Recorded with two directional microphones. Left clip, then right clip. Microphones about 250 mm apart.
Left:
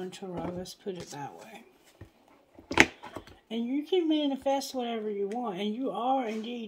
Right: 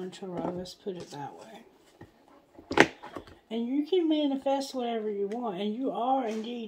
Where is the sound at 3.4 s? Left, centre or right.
Left.